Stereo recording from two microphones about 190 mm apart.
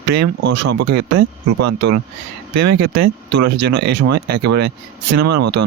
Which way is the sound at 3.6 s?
60° right (ahead or behind).